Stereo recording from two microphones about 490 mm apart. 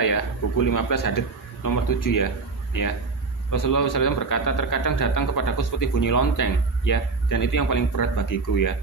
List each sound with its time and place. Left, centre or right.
0.0 s a man's voice: left